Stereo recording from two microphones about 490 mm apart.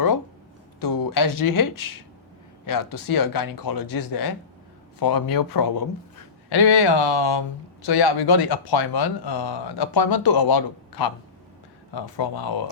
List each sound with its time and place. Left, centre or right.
0.8 s speech: left